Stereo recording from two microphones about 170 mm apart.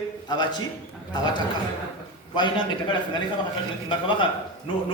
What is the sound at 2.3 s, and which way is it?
Speech, 25° left (ahead or behind).